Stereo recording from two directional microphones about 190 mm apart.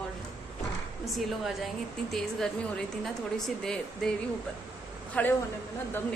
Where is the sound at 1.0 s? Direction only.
Centre (ahead or behind).